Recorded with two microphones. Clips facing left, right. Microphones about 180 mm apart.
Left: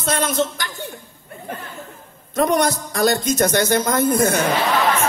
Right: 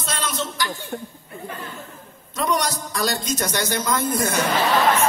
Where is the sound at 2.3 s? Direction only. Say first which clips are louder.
Left 6 dB; 55° left (ahead or behind).